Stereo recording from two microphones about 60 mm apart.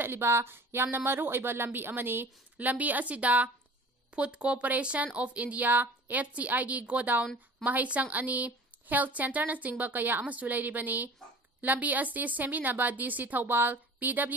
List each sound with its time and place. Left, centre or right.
0.0 s a woman's voice: right